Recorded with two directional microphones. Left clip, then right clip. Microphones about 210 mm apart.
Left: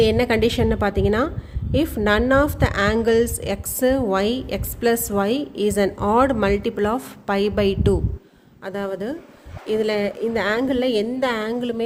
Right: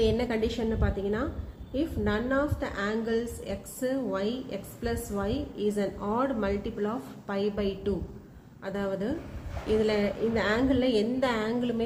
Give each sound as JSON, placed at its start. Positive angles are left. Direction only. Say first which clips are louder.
{"t": 0.0, "sound": "a woman's voice", "louder": "left 9 dB", "side_deg": 45}